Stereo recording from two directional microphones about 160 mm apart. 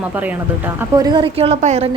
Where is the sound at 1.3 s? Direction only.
40° right (ahead or behind).